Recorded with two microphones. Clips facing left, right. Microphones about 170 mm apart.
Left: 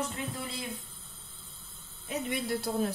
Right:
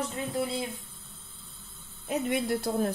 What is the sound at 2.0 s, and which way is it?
Speech, 50° right (ahead or behind).